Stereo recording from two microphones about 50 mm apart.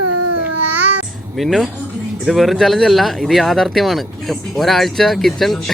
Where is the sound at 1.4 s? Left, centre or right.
Centre.